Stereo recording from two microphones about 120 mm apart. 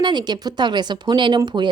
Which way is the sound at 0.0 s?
40° right (ahead or behind).